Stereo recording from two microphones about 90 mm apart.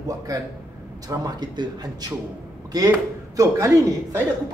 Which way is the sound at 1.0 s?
45° right (ahead or behind).